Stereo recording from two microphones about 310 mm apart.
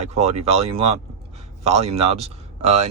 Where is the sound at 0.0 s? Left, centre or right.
Right.